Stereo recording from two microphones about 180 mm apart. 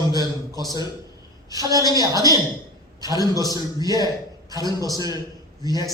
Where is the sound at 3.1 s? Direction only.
20° left (ahead or behind).